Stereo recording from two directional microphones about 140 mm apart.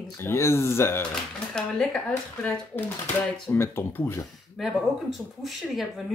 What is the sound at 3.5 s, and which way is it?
Speech, 15° left (ahead or behind).